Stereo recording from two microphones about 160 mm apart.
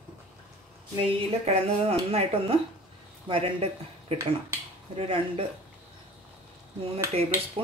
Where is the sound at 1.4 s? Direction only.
40° right (ahead or behind).